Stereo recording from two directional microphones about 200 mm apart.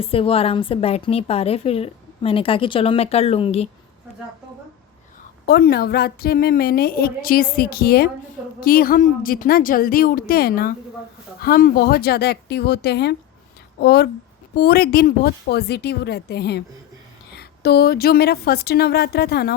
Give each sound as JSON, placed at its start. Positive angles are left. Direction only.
{"t": 0.0, "sound": "a woman's voice", "side_deg": 30}
{"t": 5.5, "sound": "a woman's voice", "side_deg": 50}